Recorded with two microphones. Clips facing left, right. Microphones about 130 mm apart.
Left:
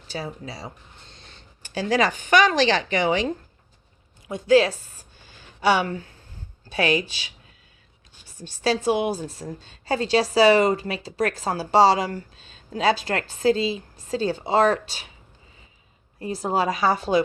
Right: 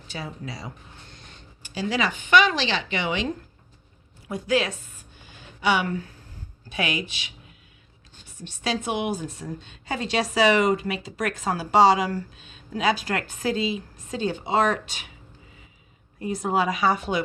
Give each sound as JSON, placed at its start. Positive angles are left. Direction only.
{"t": 0.1, "sound": "speech", "side_deg": 35}
{"t": 1.8, "sound": "a woman's voice", "side_deg": 40}
{"t": 4.3, "sound": "a woman's voice", "side_deg": 25}
{"t": 8.4, "sound": "a woman's voice", "side_deg": 35}
{"t": 16.2, "sound": "a woman's voice", "side_deg": 30}